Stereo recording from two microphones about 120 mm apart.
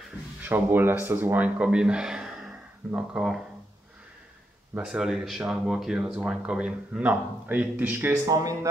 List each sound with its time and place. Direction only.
0.4 s speech: 15° right (ahead or behind)
4.7 s speech: 5° right (ahead or behind)
8.3 s speech: 30° right (ahead or behind)